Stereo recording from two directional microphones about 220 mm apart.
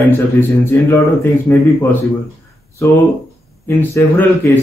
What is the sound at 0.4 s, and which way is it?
A man's voice, 10° left (ahead or behind).